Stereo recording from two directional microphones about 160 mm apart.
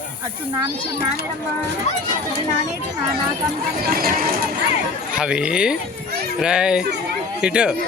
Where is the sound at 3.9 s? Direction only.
65° right (ahead or behind).